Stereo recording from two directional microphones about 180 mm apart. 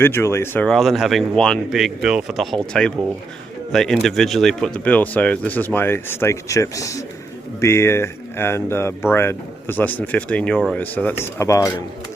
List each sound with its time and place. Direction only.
0.0 s speech: 15° left (ahead or behind)